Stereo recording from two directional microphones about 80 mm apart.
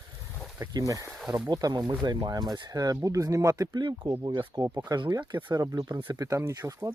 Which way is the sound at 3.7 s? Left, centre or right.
Right.